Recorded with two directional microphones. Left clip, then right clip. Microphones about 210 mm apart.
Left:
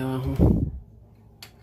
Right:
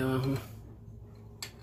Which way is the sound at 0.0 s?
15° left (ahead or behind).